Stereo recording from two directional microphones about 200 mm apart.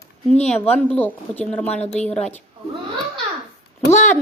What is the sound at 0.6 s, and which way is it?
A woman's voice, 5° left (ahead or behind).